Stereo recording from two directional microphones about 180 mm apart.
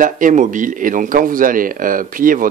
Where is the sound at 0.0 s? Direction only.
45° right (ahead or behind).